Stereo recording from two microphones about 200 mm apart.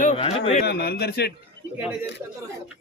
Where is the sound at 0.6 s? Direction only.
55° left (ahead or behind).